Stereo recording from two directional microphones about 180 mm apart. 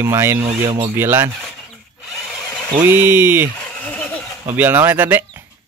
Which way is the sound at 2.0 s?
Centre (ahead or behind).